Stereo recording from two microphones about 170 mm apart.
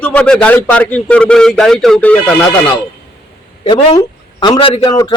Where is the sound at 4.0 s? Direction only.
25° left (ahead or behind).